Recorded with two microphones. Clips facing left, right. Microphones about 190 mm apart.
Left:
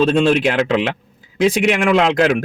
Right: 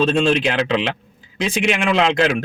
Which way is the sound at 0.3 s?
45° left (ahead or behind).